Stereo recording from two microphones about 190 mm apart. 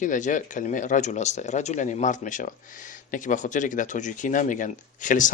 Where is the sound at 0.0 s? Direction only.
40° left (ahead or behind).